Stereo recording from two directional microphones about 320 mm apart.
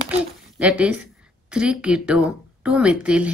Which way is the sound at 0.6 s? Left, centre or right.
Centre.